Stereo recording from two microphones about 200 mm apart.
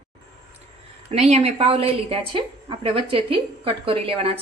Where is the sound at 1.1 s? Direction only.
30° right (ahead or behind).